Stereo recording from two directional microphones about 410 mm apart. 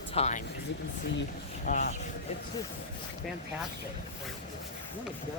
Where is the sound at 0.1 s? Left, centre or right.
Centre.